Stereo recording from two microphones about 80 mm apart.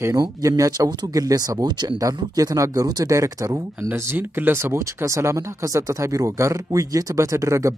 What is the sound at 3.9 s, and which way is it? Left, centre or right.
Speech, right.